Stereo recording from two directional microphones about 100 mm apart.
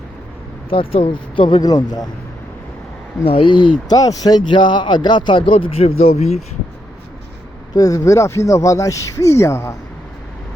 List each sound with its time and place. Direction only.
0.7 s speech: 65° left (ahead or behind)
1.1 s speech: 55° left (ahead or behind)
3.2 s speech: 60° left (ahead or behind)
3.9 s speech: 35° left (ahead or behind); by 6.4 s 90° left
7.7 s speech: 35° left (ahead or behind)